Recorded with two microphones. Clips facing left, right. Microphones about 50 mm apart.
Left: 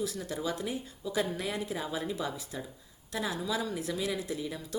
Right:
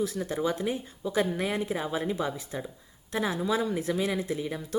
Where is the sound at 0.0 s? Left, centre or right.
Right.